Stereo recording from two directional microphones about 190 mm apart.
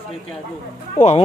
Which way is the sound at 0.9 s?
35° left (ahead or behind).